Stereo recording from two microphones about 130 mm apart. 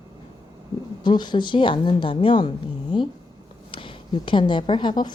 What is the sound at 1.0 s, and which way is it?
A woman's voice, 35° left (ahead or behind).